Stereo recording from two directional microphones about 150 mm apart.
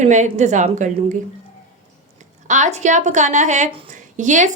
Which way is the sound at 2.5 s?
55° right (ahead or behind).